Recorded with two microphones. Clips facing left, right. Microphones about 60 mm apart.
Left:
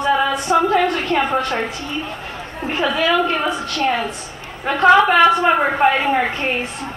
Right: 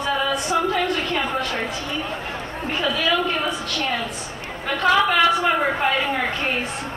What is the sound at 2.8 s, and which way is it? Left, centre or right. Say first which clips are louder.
Speech: left 5 dB; left.